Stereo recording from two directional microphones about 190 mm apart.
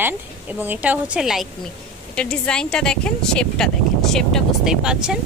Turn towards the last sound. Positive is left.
turn(degrees=-5)  # may be behind; listen again after turning